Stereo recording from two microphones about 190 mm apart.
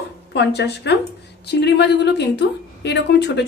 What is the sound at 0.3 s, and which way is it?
Speech, 60° left (ahead or behind).